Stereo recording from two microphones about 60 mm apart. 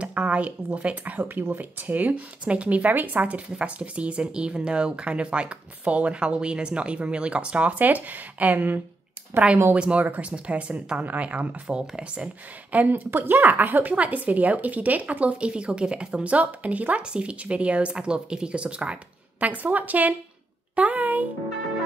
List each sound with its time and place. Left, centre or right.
0.0 s speech: right
9.8 s speech: centre
10.0 s speech: right
10.3 s speech: centre
12.7 s speech: right
20.7 s a sound: right